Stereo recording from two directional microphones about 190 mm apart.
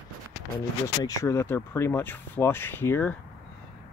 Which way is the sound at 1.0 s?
15° left (ahead or behind).